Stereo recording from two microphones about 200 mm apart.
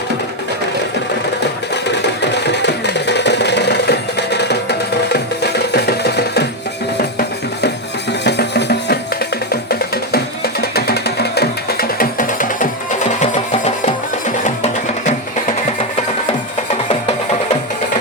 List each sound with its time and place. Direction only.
1.7 s music: 60° left (ahead or behind)
8.2 s music: 60° left (ahead or behind); by 12.6 s 40° left (ahead or behind)
14.4 s music: 35° left (ahead or behind)